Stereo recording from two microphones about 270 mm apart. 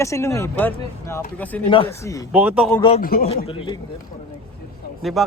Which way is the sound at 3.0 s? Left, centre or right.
Left.